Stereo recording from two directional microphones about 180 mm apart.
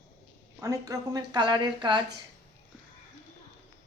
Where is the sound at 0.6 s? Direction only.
20° right (ahead or behind).